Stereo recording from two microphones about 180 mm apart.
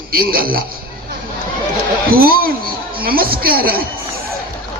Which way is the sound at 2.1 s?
55° right (ahead or behind).